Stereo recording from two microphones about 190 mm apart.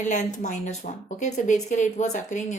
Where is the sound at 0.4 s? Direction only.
40° left (ahead or behind).